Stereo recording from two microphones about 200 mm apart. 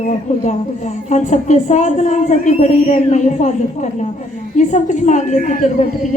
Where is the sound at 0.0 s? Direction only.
35° left (ahead or behind).